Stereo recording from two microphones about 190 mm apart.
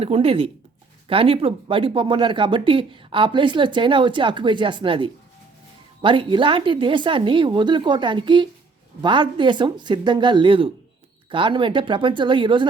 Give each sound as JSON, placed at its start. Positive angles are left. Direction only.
{"t": 0.0, "sound": "speech", "side_deg": -30}